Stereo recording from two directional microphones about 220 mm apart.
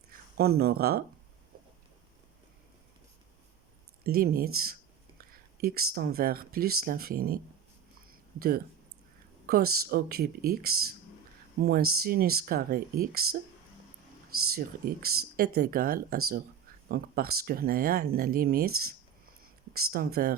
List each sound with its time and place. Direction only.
0.3 s speech: 45° right (ahead or behind)
4.0 s speech: 45° right (ahead or behind)
8.4 s speech: 45° right (ahead or behind)
14.5 s speech: 45° right (ahead or behind)
19.4 s a sound: 45° right (ahead or behind)